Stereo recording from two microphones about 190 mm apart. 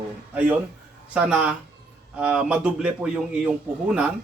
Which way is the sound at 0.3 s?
10° right (ahead or behind).